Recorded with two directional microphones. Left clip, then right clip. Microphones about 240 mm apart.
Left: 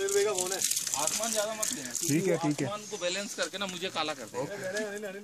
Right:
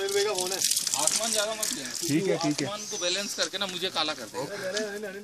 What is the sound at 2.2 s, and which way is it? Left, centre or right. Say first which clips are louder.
Speech: right 1 dB; left.